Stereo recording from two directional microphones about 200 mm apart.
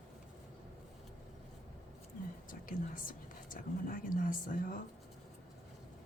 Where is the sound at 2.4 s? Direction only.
45° left (ahead or behind).